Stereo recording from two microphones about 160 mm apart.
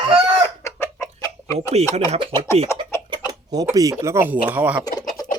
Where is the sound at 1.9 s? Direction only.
35° right (ahead or behind).